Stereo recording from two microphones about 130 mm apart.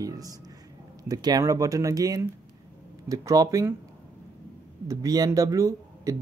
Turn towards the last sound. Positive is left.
turn(degrees=-25)  # may be behind; listen again after turning